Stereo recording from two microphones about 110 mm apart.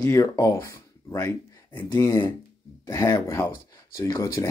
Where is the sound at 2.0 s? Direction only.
35° left (ahead or behind).